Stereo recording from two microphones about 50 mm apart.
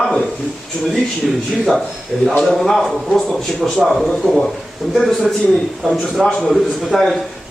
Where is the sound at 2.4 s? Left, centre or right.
Centre.